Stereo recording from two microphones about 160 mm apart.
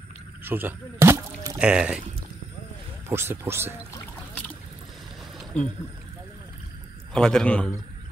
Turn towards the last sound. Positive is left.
turn(degrees=5)  # may be behind; listen again after turning